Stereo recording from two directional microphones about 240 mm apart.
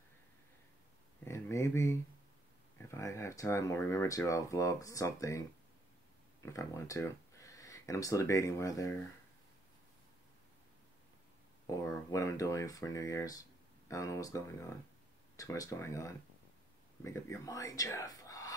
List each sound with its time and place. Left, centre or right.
1.2 s a sound: centre
2.9 s speech: centre
6.4 s speech: centre
11.7 s speech: centre